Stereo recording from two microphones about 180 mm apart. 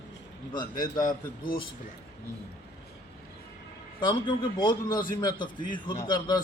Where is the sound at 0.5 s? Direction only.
20° left (ahead or behind).